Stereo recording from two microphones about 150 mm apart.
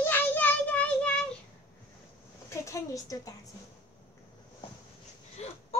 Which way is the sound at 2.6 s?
20° left (ahead or behind).